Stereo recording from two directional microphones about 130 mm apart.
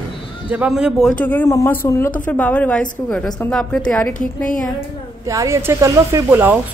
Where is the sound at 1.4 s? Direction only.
25° left (ahead or behind).